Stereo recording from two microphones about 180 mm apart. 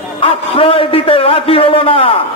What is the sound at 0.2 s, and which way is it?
A man's voice, 30° left (ahead or behind).